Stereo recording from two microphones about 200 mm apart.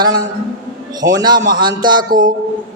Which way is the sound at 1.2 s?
20° right (ahead or behind).